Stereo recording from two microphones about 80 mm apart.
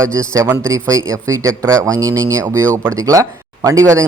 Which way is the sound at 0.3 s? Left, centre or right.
Right.